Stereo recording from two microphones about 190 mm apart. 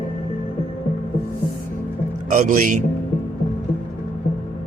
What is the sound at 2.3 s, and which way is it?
Speech, 45° right (ahead or behind).